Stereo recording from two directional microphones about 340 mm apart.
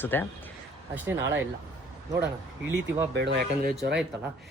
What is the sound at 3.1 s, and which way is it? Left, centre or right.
Speech, right.